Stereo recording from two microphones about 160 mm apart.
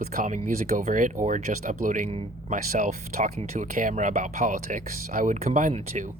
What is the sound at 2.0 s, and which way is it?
Speech, 35° right (ahead or behind).